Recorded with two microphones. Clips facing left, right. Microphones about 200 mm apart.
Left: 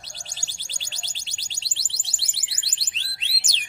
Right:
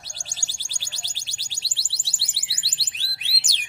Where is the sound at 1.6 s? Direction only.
20° left (ahead or behind).